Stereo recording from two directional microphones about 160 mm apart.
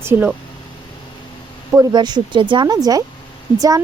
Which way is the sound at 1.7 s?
25° right (ahead or behind).